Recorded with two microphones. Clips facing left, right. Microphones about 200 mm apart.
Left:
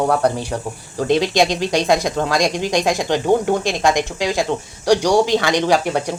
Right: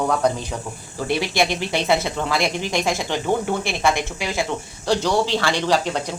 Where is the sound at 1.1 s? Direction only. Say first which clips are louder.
Left 5 dB; 20° left (ahead or behind).